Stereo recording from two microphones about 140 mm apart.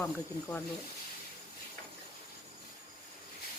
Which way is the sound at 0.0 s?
15° left (ahead or behind).